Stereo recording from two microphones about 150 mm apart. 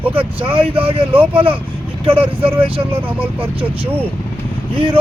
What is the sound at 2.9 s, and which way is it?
Speech, 15° right (ahead or behind).